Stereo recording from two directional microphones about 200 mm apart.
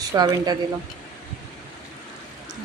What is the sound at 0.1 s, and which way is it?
Speech, 20° right (ahead or behind).